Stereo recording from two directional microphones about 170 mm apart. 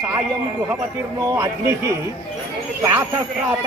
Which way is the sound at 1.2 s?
20° right (ahead or behind).